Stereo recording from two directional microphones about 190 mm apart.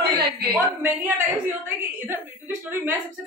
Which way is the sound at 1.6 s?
10° right (ahead or behind).